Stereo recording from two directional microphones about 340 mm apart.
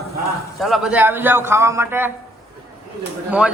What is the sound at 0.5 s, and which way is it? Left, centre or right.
A man's voice, centre.